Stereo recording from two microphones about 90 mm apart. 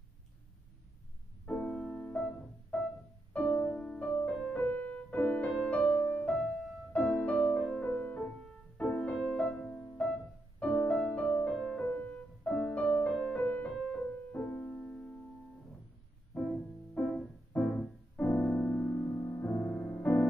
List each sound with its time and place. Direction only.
1.4 s music: 15° left (ahead or behind)
6.3 s music: 5° left (ahead or behind)
9.2 s music: 5° left (ahead or behind)
9.7 s music: 15° left (ahead or behind)
13.7 s music: 5° left (ahead or behind)
14.0 s music: 20° left (ahead or behind)
16.3 s music: 15° left (ahead or behind)